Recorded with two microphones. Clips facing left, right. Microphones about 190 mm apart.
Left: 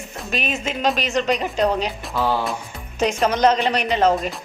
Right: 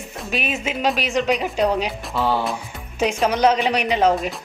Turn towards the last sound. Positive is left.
turn(degrees=-10)  # may be behind; listen again after turning